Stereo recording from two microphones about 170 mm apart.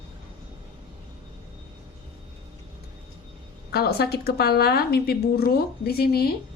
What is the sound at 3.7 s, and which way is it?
Speech, 65° left (ahead or behind).